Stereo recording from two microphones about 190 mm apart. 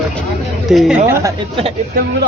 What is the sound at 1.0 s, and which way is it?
Speech, 15° right (ahead or behind).